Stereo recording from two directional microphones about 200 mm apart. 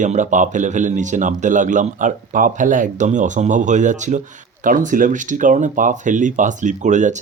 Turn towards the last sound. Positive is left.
turn(degrees=-35)  # may be behind; listen again after turning